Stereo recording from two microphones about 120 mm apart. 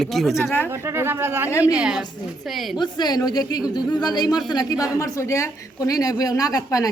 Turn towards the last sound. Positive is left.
turn(degrees=30)  # may be behind; listen again after turning